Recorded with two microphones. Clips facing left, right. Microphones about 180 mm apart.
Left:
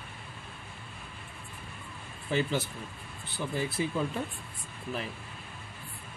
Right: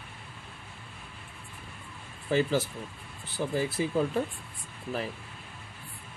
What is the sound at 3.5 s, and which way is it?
Speech, 40° right (ahead or behind).